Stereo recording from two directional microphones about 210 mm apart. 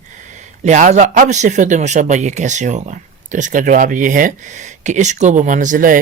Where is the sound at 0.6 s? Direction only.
35° right (ahead or behind).